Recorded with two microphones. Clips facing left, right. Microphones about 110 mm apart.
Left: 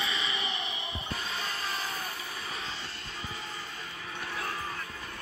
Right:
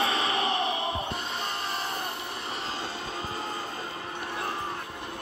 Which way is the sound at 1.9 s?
65° right (ahead or behind).